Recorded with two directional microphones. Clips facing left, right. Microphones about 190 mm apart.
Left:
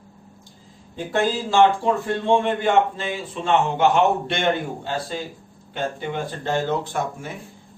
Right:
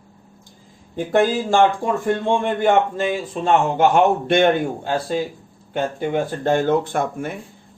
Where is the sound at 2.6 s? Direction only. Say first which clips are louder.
Right 3 dB; 45° right (ahead or behind).